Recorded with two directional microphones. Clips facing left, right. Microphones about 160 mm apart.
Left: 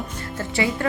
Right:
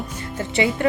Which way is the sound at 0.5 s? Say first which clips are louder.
Right 3 dB; 20° right (ahead or behind).